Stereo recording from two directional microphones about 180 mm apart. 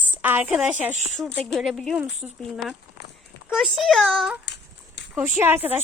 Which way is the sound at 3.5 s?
Centre (ahead or behind).